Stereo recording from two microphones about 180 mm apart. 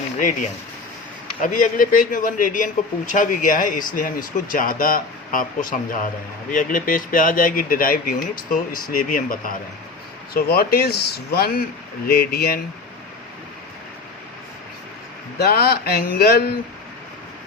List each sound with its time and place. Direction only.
1.4 s speech: 50° left (ahead or behind)
15.4 s speech: 60° left (ahead or behind)